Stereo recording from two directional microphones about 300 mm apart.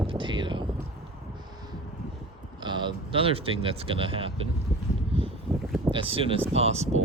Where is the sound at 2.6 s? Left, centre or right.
Centre.